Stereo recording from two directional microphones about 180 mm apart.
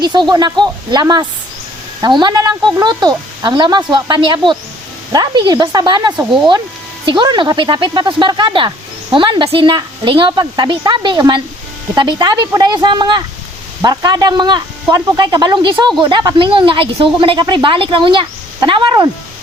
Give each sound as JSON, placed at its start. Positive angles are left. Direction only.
{"t": 0.0, "sound": "a woman's voice", "side_deg": -25}